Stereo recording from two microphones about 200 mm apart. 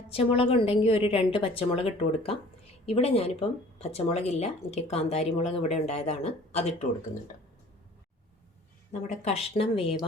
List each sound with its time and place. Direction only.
0.1 s a woman's voice: 30° left (ahead or behind)
8.9 s a woman's voice: 35° left (ahead or behind)